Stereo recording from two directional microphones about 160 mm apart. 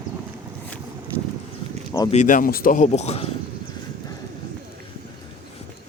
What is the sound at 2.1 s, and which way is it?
A man's voice, 50° left (ahead or behind).